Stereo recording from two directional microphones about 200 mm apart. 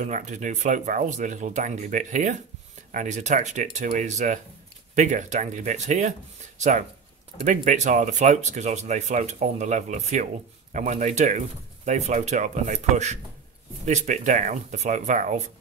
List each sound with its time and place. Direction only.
0.0 s speech: 35° right (ahead or behind)
7.4 s speech: 35° right (ahead or behind)